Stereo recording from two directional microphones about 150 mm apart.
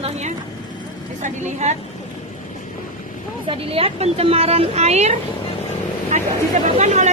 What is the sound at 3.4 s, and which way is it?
A woman's voice, 40° right (ahead or behind).